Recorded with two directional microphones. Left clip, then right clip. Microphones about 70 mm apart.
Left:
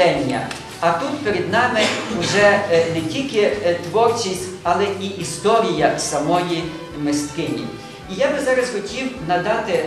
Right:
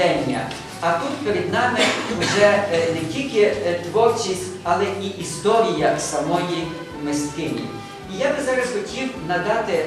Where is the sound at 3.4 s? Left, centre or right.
Left.